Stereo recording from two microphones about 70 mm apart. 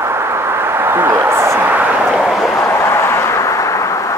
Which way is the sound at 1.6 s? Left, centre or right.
Right.